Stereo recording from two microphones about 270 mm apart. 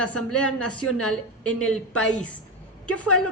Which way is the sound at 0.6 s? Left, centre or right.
Left.